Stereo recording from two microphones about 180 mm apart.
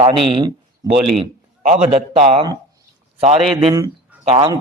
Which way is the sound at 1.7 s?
35° right (ahead or behind).